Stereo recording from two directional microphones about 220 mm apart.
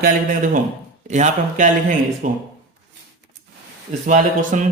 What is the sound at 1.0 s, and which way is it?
Speech, 35° right (ahead or behind).